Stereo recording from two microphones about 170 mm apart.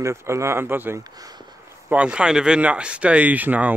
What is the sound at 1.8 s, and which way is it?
Speech, 5° right (ahead or behind).